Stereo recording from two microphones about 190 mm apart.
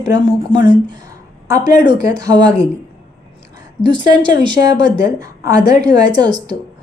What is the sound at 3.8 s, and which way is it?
A woman's voice, 25° right (ahead or behind).